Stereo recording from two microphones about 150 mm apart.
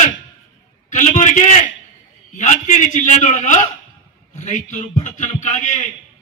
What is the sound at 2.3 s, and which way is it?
A man's voice, 55° left (ahead or behind).